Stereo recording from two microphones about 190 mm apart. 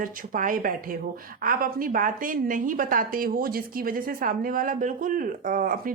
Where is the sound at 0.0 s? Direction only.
45° right (ahead or behind).